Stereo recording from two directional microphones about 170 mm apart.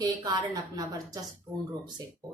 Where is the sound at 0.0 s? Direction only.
25° right (ahead or behind).